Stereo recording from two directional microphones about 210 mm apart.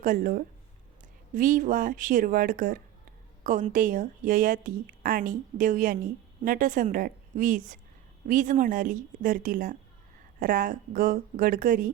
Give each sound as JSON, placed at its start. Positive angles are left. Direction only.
{"t": 0.0, "sound": "speech", "side_deg": -40}